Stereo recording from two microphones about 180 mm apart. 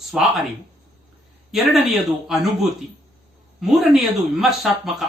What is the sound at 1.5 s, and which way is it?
Speech, centre (ahead or behind).